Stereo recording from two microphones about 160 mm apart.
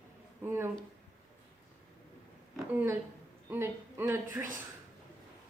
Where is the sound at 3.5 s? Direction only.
15° right (ahead or behind).